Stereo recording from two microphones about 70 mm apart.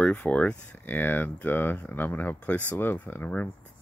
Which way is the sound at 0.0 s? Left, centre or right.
Left.